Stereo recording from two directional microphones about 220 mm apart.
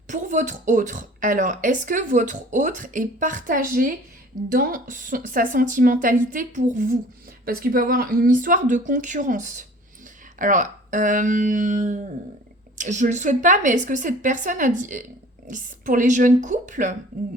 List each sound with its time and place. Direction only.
0.1 s speech: 35° right (ahead or behind)